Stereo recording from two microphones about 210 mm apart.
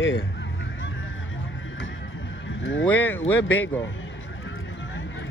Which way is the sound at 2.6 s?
65° left (ahead or behind).